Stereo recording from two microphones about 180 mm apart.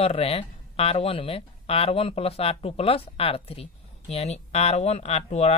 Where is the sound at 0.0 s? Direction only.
35° left (ahead or behind).